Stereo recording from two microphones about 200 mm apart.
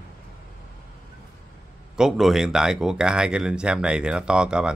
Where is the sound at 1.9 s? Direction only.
Centre (ahead or behind).